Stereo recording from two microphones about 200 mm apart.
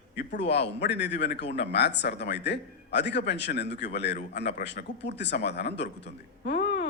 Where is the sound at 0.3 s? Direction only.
60° left (ahead or behind).